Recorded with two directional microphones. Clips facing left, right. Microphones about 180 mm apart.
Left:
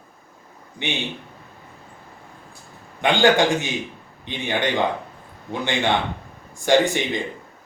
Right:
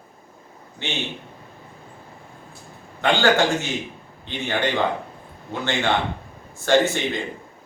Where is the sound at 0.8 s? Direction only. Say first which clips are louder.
Left 3 dB; 15° left (ahead or behind).